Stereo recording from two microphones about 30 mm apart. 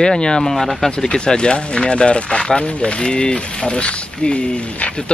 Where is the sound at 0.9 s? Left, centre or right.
Left.